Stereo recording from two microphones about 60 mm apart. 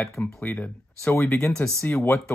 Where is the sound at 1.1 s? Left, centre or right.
Left.